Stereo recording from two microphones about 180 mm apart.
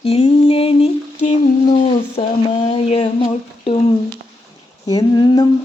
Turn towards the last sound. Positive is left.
turn(degrees=25)  # may be behind; listen again after turning